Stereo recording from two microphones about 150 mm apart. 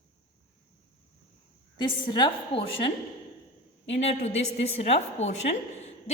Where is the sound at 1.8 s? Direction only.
30° left (ahead or behind).